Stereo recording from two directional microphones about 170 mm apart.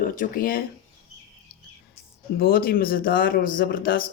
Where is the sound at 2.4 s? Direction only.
60° left (ahead or behind).